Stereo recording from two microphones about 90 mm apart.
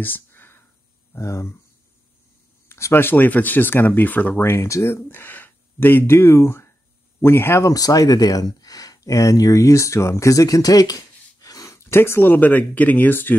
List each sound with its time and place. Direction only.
0.0 s a sound: 20° left (ahead or behind)
1.1 s speech: 30° left (ahead or behind)
2.7 s speech: 25° left (ahead or behind)
7.7 s speech: 40° left (ahead or behind); by 13.4 s 20° left (ahead or behind)